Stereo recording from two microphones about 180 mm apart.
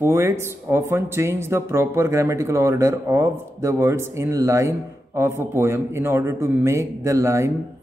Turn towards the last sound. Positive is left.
turn(degrees=-15)  # may be behind; listen again after turning